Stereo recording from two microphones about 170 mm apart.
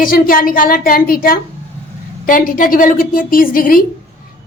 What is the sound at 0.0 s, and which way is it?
A woman's voice, 55° left (ahead or behind).